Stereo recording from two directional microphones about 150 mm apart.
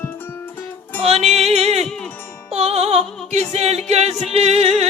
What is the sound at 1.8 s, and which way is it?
Music, centre (ahead or behind).